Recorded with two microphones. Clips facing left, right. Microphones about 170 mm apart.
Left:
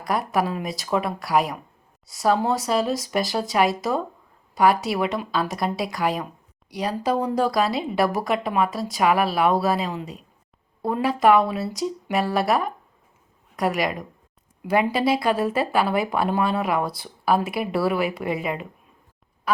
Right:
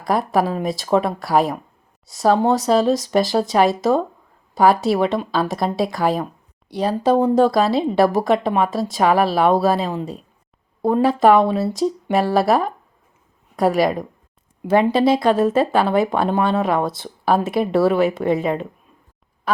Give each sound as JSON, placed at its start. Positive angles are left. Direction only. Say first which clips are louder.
{"t": 0.1, "sound": "a woman's voice", "louder": "right 5 dB", "side_deg": -30}
{"t": 14.9, "sound": "speech", "louder": "right 6 dB", "side_deg": -25}